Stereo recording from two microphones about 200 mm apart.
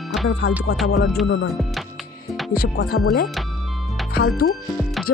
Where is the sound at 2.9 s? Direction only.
60° left (ahead or behind).